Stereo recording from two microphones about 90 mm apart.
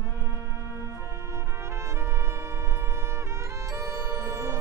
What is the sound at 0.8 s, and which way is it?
Brass instrument, 35° right (ahead or behind).